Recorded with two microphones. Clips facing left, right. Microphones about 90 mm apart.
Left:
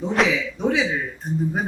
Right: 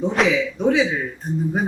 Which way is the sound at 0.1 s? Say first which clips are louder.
Left 2 dB; centre (ahead or behind).